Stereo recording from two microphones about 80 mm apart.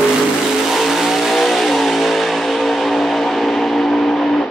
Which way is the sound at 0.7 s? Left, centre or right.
Centre.